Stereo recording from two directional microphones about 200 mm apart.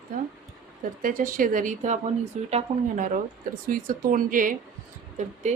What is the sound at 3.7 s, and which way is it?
Speech, 45° right (ahead or behind).